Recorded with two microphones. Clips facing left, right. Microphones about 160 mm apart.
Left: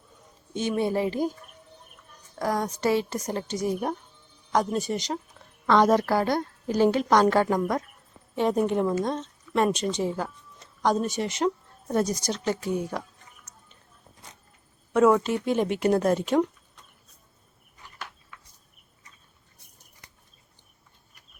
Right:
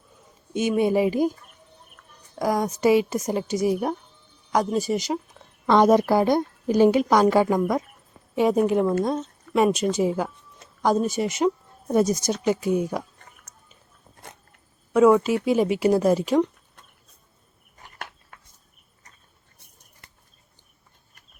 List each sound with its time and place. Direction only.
0.5 s a woman's voice: 10° right (ahead or behind)
2.3 s a woman's voice: 10° right (ahead or behind)
11.3 s a sound: 5° right (ahead or behind)
12.5 s a woman's voice: 15° right (ahead or behind)
14.2 s a sound: 55° right (ahead or behind)
14.9 s speech: 5° right (ahead or behind)
18.3 s cricket: 50° right (ahead or behind)